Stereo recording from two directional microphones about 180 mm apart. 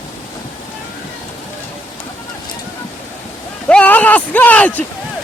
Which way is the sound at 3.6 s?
10° left (ahead or behind).